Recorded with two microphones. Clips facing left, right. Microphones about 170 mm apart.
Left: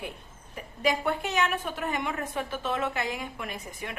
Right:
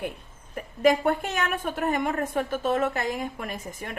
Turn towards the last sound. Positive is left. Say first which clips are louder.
# right 3 dB
turn(degrees=-45)  # may be behind; listen again after turning